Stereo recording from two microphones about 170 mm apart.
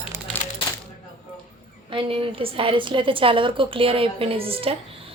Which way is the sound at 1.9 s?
30° right (ahead or behind).